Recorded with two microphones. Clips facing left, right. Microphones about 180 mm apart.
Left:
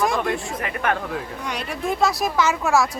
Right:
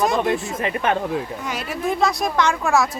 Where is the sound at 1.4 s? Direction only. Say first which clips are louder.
Right 2 dB; 5° right (ahead or behind).